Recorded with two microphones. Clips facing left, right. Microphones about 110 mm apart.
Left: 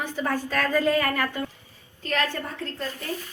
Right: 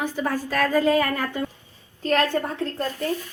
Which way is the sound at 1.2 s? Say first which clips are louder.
Right 1 dB; 20° right (ahead or behind).